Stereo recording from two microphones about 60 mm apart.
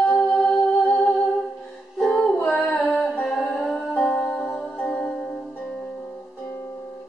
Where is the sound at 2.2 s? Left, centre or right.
Centre.